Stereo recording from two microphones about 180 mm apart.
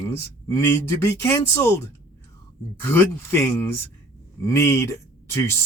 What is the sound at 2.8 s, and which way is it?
Speech, 10° left (ahead or behind).